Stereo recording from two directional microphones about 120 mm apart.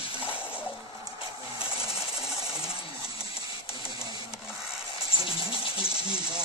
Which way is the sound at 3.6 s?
45° left (ahead or behind).